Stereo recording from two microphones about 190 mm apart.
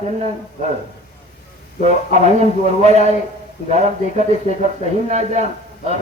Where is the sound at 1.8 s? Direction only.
35° right (ahead or behind).